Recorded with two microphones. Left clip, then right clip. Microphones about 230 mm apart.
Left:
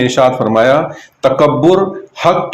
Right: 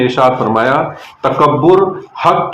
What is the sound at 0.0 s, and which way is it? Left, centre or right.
A man's voice, left.